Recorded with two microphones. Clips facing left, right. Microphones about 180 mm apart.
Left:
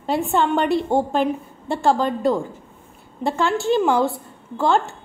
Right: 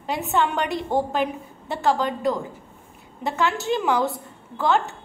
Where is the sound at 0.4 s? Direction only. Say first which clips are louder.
Left 3 dB; 30° left (ahead or behind).